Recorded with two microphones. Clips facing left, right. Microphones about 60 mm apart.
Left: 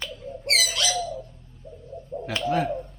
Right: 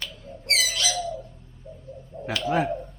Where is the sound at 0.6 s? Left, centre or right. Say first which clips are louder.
Left 1 dB; left.